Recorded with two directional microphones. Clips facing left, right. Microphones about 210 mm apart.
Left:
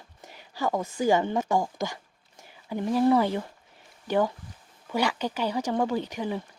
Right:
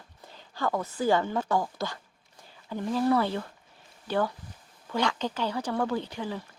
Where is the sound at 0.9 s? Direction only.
15° left (ahead or behind).